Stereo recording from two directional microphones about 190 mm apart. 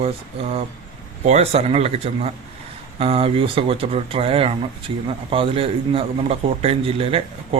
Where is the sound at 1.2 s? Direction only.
35° right (ahead or behind).